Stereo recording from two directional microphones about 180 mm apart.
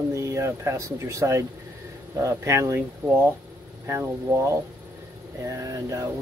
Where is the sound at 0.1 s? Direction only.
15° right (ahead or behind).